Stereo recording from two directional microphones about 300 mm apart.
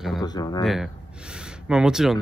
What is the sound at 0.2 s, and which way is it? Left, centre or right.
Speech, centre.